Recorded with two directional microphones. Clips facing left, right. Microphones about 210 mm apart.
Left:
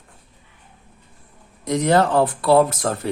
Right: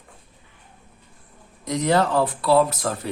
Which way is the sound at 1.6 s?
50° left (ahead or behind).